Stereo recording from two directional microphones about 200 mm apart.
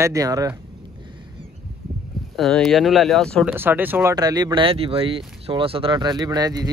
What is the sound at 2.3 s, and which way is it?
Speech, centre (ahead or behind).